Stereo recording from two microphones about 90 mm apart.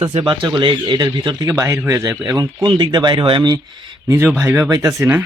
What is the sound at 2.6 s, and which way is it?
Speech, 55° right (ahead or behind).